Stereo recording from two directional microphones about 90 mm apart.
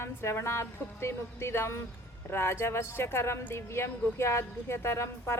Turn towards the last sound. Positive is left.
turn(degrees=30)  # may be behind; listen again after turning